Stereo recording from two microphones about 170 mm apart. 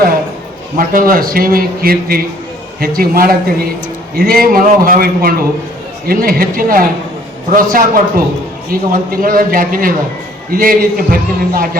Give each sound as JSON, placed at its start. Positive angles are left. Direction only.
{"t": 0.8, "sound": "a man's voice", "side_deg": -55}